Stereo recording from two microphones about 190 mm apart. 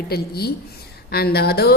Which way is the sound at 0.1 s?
55° left (ahead or behind).